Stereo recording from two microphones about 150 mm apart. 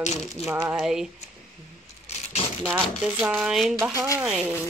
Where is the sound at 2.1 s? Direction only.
45° left (ahead or behind).